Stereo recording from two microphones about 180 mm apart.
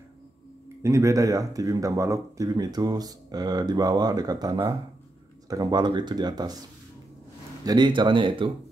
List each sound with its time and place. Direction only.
0.8 s speech: 15° right (ahead or behind)
7.6 s speech: 25° right (ahead or behind)